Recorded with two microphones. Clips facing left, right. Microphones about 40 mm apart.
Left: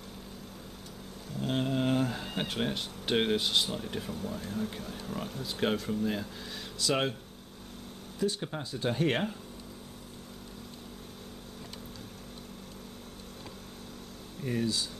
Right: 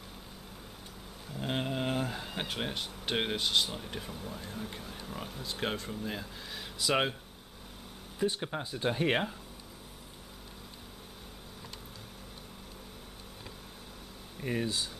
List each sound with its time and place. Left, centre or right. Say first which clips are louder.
1.3 s speech: left 3 dB; centre
6.8 s speech: even; centre
8.2 s speech: even; centre
14.4 s speech: left 2 dB; right